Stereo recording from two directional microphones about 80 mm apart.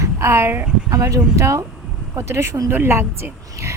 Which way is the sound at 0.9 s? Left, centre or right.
Right.